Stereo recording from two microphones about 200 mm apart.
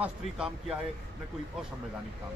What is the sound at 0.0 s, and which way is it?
Speech, 5° right (ahead or behind).